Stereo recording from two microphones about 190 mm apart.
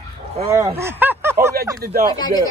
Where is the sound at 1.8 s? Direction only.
55° right (ahead or behind).